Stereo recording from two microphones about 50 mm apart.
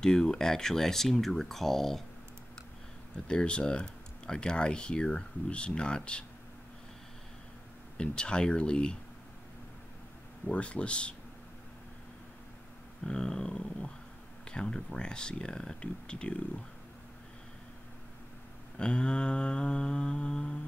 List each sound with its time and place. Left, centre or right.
0.0 s speech: centre
3.3 s speech: centre
8.0 s speech: centre
10.4 s speech: left
13.0 s speech: centre
18.8 s speech: centre